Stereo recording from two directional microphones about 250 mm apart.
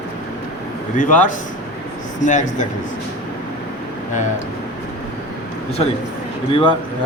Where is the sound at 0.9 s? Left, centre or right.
Left.